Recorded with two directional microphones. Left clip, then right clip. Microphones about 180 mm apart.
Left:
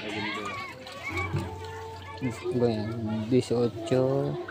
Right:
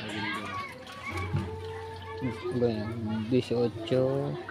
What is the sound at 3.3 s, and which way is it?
Speech, 10° left (ahead or behind).